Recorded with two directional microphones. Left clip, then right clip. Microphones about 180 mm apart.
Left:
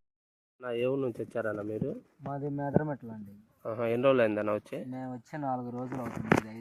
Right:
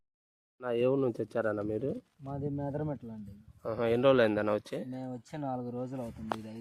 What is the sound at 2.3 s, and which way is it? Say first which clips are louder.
Speech: left 5 dB; 10° right (ahead or behind).